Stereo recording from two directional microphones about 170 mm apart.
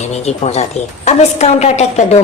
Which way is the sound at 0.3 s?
40° left (ahead or behind).